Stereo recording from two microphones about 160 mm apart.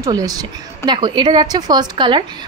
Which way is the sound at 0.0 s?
20° right (ahead or behind).